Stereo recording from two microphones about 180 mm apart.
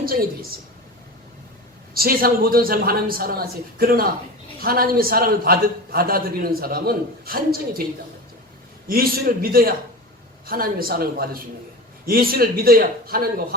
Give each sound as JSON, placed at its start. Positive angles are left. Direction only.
{"t": 0.0, "sound": "speech", "side_deg": -55}
{"t": 1.9, "sound": "a man's voice", "side_deg": -55}
{"t": 8.9, "sound": "a man's voice", "side_deg": -55}